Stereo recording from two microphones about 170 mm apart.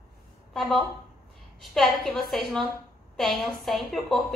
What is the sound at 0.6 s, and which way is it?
A woman's voice, centre (ahead or behind).